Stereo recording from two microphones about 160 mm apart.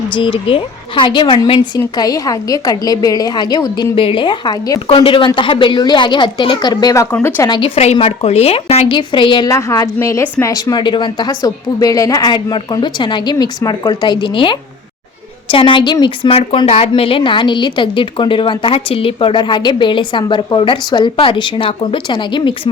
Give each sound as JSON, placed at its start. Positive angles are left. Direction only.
{"t": 0.1, "sound": "a woman's voice", "side_deg": 35}
{"t": 7.5, "sound": "a woman's voice", "side_deg": 40}
{"t": 9.5, "sound": "a woman's voice", "side_deg": 20}